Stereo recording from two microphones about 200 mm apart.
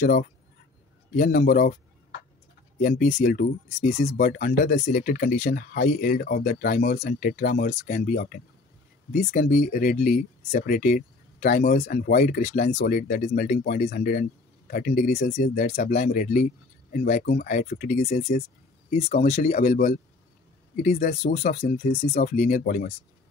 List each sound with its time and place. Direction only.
1.1 s speech: 45° left (ahead or behind)
2.8 s speech: 40° left (ahead or behind)
4.7 s speech: 40° left (ahead or behind)